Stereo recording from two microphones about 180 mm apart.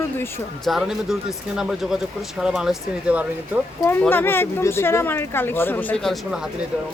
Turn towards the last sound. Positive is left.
turn(degrees=0)  # may be behind; listen again after turning